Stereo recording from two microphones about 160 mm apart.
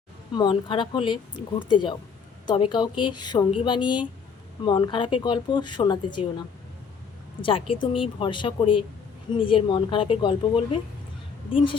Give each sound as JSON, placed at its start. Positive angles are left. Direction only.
{"t": 0.3, "sound": "speech", "side_deg": 30}
{"t": 7.4, "sound": "speech", "side_deg": 35}